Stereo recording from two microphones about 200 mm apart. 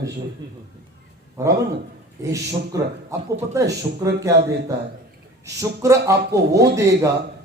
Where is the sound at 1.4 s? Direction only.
15° right (ahead or behind).